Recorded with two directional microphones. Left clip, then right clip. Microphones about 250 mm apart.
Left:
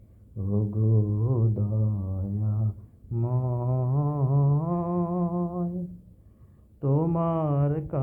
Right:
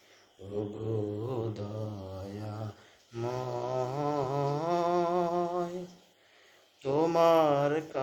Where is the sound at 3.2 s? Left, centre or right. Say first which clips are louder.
Even; right.